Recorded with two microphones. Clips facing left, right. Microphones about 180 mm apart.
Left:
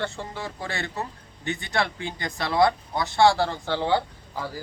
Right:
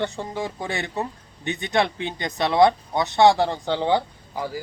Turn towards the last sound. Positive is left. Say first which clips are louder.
# right 4 dB
turn(degrees=-15)  # may be behind; listen again after turning